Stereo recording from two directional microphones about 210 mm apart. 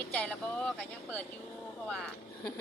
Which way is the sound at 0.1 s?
5° left (ahead or behind).